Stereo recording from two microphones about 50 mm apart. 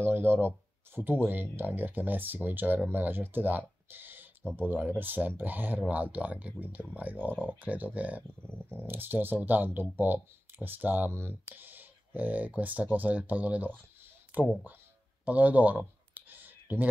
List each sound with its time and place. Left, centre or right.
0.0 s speech: right
8.4 s a sound: left
8.8 s speech: right
11.1 s speech: right
11.4 s speech: right
15.2 s clicking: right